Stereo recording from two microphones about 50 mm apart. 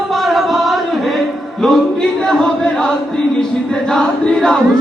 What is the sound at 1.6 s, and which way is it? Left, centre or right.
Chant, centre.